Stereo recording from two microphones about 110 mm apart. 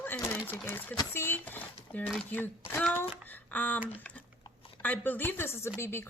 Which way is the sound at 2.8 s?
15° left (ahead or behind).